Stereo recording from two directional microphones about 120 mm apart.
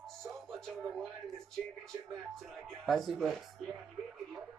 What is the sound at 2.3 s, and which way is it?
Speech, 5° left (ahead or behind).